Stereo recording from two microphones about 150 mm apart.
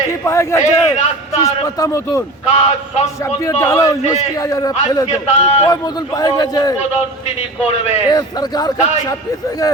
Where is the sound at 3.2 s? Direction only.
20° left (ahead or behind).